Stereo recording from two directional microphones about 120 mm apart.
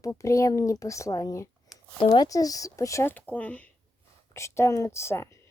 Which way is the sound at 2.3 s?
30° left (ahead or behind).